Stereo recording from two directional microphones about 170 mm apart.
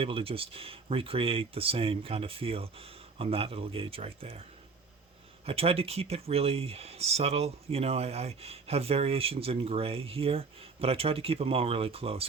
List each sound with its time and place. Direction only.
0.0 s speech: 35° right (ahead or behind)
5.5 s speech: 35° right (ahead or behind)